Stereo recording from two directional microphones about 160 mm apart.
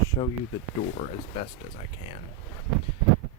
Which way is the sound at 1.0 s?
40° left (ahead or behind).